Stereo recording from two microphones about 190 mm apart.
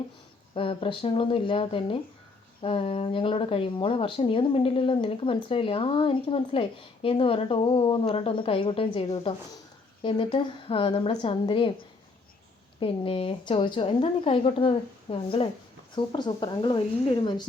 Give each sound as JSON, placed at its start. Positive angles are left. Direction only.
{"t": 0.5, "sound": "speech", "side_deg": 30}
{"t": 12.8, "sound": "speech", "side_deg": 30}